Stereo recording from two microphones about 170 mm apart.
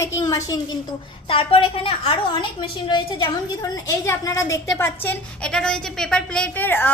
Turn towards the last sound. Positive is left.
turn(degrees=10)  # may be behind; listen again after turning